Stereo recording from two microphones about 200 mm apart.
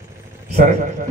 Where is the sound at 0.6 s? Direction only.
40° right (ahead or behind).